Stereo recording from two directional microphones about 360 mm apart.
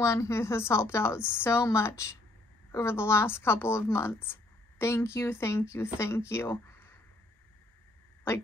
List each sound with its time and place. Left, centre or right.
0.0 s a woman's voice: centre